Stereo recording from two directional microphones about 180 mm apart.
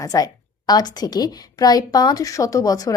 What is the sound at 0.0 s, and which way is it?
A woman's voice, 20° left (ahead or behind).